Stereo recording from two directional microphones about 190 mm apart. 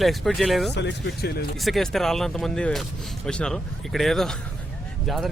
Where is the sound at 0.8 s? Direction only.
65° left (ahead or behind).